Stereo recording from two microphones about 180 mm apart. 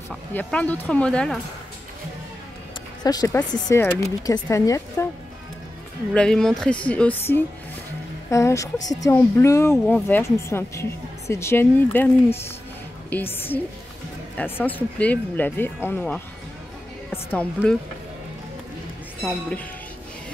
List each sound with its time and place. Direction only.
0.3 s speech: 10° left (ahead or behind)
3.0 s speech: 20° left (ahead or behind)
6.1 s speech: 5° left (ahead or behind)
19.2 s speech: 5° left (ahead or behind)